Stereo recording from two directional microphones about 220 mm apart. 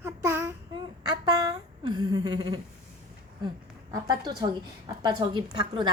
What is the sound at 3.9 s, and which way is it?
A woman's voice, 20° right (ahead or behind).